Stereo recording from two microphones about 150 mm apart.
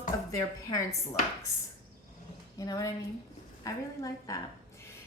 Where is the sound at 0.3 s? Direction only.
20° left (ahead or behind).